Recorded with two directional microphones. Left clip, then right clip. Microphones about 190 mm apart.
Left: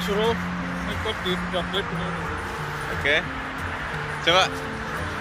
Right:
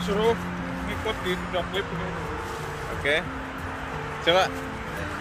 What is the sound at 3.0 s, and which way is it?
Speech, 5° right (ahead or behind).